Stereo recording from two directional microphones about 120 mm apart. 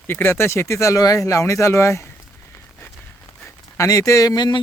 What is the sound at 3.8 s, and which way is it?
Speech, 25° left (ahead or behind).